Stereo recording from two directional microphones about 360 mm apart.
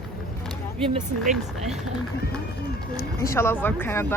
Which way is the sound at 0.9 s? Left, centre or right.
Centre.